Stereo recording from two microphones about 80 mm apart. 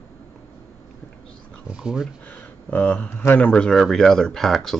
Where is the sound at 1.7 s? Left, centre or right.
Centre.